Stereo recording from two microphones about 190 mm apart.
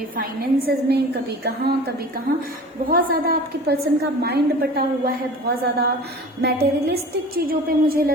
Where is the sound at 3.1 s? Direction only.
55° right (ahead or behind).